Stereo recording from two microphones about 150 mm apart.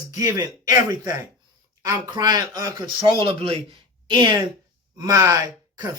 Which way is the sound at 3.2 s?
35° right (ahead or behind).